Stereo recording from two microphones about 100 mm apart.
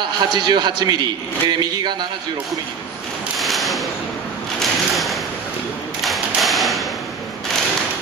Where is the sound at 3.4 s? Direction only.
Centre (ahead or behind).